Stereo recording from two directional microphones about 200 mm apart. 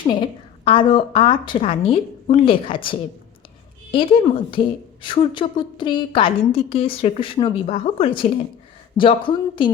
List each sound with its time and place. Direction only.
0.0 s a woman's voice: 25° left (ahead or behind)
4.6 s a woman's voice: 25° left (ahead or behind)